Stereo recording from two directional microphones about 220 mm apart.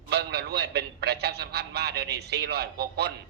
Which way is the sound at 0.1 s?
50° right (ahead or behind).